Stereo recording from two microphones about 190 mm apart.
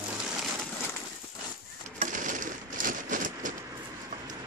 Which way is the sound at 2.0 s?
40° right (ahead or behind).